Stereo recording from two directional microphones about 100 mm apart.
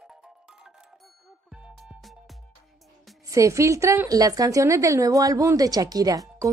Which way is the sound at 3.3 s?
30° right (ahead or behind).